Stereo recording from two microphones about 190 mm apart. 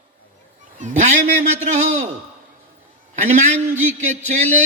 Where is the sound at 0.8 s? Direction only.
40° right (ahead or behind).